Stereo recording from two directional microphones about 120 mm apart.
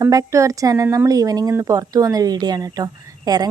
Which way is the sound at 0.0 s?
25° right (ahead or behind).